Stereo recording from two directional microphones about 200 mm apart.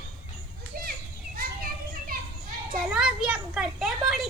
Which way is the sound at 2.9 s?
5° right (ahead or behind).